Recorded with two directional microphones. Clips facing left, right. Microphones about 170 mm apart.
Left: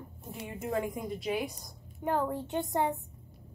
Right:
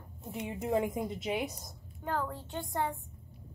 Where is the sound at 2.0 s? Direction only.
20° left (ahead or behind).